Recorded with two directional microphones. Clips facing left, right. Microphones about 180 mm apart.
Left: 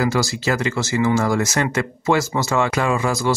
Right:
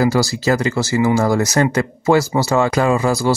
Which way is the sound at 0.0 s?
35° right (ahead or behind).